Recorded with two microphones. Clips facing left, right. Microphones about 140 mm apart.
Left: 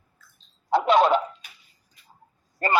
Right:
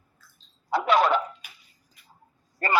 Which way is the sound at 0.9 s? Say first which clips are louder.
Left 2 dB; 25° left (ahead or behind).